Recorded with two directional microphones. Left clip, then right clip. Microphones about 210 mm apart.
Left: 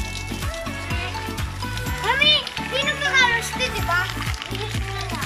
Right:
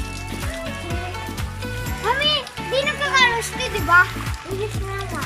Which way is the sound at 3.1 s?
50° right (ahead or behind).